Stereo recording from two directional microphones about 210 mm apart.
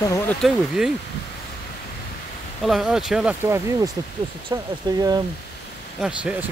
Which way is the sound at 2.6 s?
Centre (ahead or behind).